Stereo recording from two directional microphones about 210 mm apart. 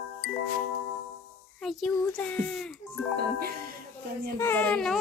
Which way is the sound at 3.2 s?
45° right (ahead or behind).